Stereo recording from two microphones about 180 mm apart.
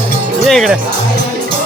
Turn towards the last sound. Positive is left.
turn(degrees=0)  # may be behind; listen again after turning